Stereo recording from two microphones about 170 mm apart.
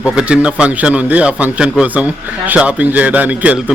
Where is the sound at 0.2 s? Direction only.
5° right (ahead or behind).